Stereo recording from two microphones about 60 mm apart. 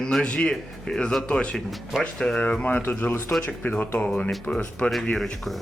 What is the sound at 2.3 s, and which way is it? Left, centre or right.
Speech, left.